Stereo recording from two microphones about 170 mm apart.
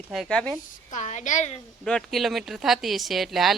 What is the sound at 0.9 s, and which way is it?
Speech, 45° left (ahead or behind).